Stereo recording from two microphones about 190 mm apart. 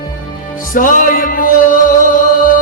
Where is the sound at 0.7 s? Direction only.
45° left (ahead or behind).